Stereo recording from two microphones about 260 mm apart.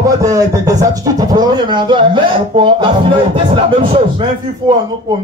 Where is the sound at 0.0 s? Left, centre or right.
Centre.